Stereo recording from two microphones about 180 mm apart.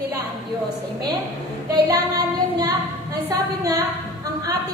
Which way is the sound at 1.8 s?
20° right (ahead or behind).